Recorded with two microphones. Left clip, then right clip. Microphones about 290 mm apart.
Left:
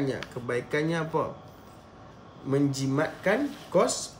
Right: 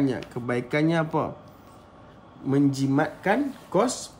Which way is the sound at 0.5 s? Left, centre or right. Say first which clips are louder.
Right 4 dB; right.